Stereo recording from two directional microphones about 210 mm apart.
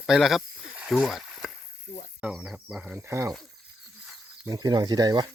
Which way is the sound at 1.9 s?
35° left (ahead or behind).